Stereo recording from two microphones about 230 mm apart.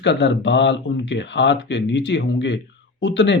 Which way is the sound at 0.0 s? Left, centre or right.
Left.